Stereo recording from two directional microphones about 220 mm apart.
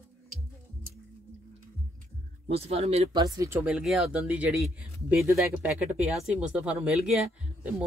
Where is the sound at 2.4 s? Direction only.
25° right (ahead or behind).